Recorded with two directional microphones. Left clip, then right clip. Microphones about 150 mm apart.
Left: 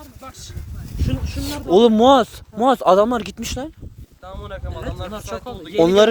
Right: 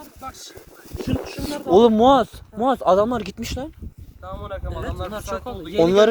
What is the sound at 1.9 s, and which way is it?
Speech, 75° left (ahead or behind).